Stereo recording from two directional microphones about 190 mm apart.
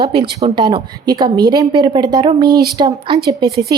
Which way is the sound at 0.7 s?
20° right (ahead or behind).